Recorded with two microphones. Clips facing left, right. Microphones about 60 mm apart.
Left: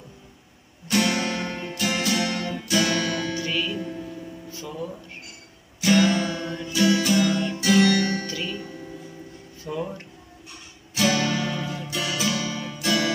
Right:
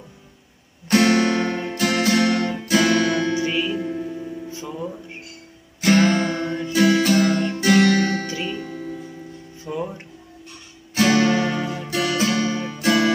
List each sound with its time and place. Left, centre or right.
0.8 s guitar: right
1.9 s music: right
2.6 s guitar: right
3.3 s music: right
5.8 s music: right
8.3 s music: right
9.7 s music: centre
11.0 s guitar: right
11.9 s music: right